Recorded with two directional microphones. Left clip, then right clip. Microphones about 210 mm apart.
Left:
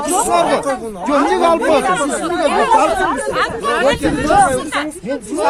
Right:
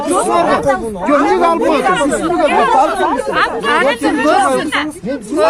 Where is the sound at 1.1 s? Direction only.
40° left (ahead or behind); by 3.5 s 60° left (ahead or behind).